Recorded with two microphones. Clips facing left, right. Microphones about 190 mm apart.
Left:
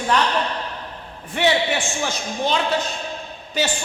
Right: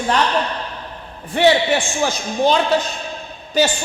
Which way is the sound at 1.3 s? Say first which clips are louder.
Right 5 dB; 35° right (ahead or behind).